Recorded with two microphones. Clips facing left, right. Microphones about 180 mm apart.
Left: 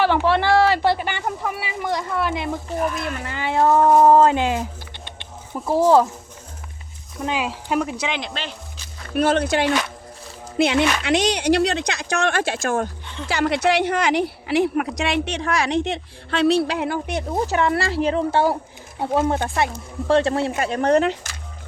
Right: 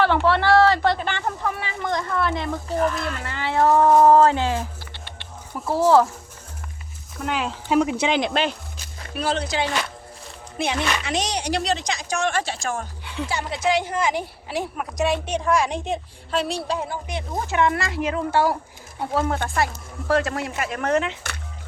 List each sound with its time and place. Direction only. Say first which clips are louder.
0.0 s speech: left 1 dB; 15° left (ahead or behind)
5.0 s chicken: left 1 dB; 20° left (ahead or behind)
7.3 s speech: left 1 dB; 10° left (ahead or behind)
7.9 s speech: right 5 dB; 30° right (ahead or behind)
8.2 s speech: right 8 dB; 50° right (ahead or behind)
9.1 s speech: left 6 dB; 55° left (ahead or behind)
10.6 s speech: left 6 dB; 70° left (ahead or behind)
13.2 s speech: left 5 dB; 80° left
17.1 s a woman's voice: left 5 dB; 40° left (ahead or behind)